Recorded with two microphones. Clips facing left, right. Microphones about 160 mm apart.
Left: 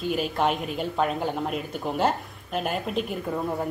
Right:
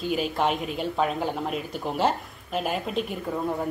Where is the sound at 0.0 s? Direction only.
Centre (ahead or behind).